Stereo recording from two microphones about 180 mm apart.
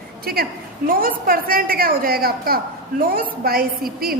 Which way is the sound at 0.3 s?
55° right (ahead or behind).